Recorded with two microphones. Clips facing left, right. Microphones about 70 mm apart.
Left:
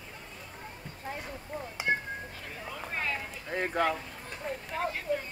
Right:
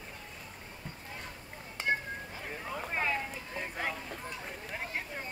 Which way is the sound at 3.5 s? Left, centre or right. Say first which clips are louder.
Left 9 dB; left.